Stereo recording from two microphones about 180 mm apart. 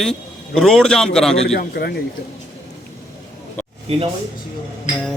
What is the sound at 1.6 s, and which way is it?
Speech, 60° left (ahead or behind).